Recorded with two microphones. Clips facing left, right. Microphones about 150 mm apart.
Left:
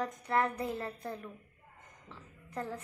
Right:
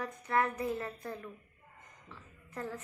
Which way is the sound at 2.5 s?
15° left (ahead or behind).